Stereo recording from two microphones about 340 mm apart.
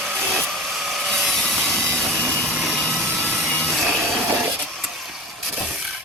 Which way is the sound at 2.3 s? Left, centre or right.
Centre.